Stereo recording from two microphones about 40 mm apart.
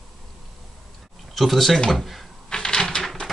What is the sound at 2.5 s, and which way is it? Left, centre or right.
Typewriter, centre.